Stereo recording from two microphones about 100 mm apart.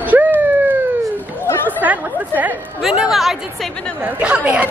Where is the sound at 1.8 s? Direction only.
15° right (ahead or behind).